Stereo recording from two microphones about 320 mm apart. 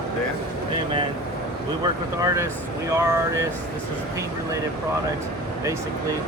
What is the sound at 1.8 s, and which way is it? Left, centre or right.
Speech, centre.